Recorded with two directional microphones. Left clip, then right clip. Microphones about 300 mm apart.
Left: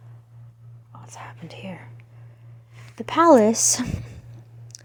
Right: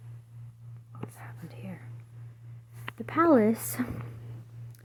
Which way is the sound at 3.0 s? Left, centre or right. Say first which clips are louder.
Left 8 dB; left.